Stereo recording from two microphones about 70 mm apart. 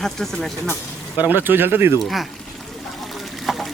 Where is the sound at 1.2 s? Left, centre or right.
Right.